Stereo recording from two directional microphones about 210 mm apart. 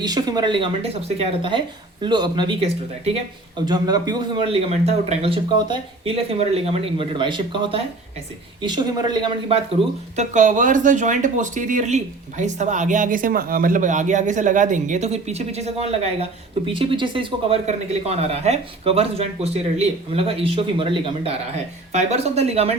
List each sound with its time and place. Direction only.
0.0 s a man's voice: 20° right (ahead or behind)
10.2 s a man's voice: 35° right (ahead or behind)